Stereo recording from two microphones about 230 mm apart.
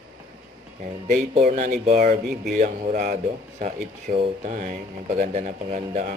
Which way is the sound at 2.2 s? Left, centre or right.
Centre.